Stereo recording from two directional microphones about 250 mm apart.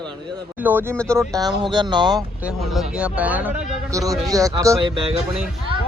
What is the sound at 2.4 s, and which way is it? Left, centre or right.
A man's voice, centre.